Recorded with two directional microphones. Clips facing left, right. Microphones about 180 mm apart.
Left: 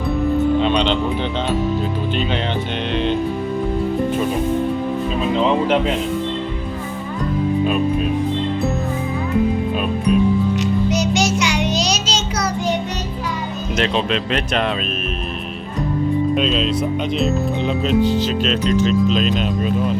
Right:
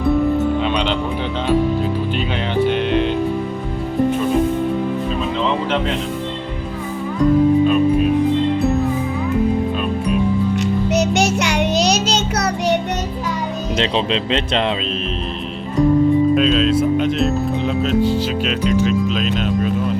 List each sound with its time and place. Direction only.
0.6 s music: 5° right (ahead or behind)
2.6 s music: 5° right (ahead or behind)
11.2 s child singing: 60° right (ahead or behind)
13.7 s speech: 25° right (ahead or behind)
16.4 s speech: centre (ahead or behind)